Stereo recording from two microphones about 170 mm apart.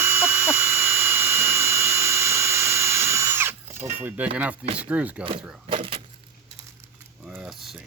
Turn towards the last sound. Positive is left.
turn(degrees=0)  # may be behind; listen again after turning